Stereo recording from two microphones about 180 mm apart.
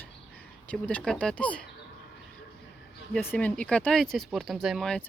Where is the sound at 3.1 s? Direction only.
5° left (ahead or behind).